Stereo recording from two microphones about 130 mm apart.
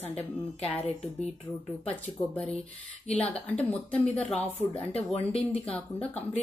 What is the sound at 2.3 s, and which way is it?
Speech, 10° left (ahead or behind).